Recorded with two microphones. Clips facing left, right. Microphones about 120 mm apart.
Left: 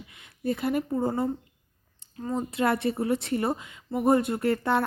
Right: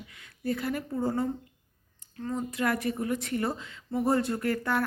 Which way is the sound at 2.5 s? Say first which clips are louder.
Left 4 dB; 25° left (ahead or behind).